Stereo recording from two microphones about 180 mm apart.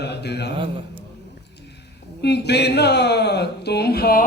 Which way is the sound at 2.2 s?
65° left (ahead or behind).